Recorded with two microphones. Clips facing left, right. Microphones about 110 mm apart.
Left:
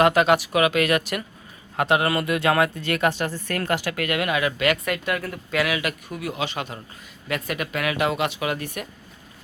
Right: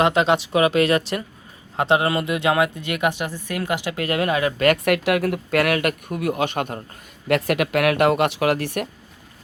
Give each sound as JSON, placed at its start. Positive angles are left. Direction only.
{"t": 0.0, "sound": "speech", "side_deg": -25}
{"t": 4.9, "sound": "speech", "side_deg": -70}
{"t": 7.3, "sound": "speech", "side_deg": -70}